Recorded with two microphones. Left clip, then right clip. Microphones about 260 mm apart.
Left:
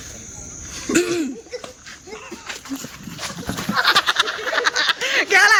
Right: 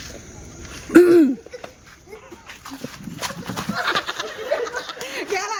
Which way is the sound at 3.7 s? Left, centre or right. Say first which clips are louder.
Left 7 dB; centre.